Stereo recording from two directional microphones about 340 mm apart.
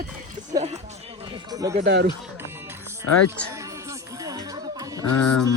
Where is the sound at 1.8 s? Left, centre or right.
Right.